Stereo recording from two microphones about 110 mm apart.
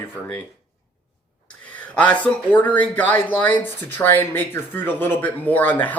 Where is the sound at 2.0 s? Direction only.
15° left (ahead or behind).